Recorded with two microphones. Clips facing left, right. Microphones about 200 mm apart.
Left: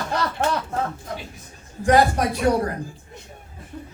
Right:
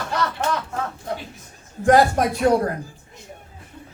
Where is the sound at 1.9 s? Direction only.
50° right (ahead or behind).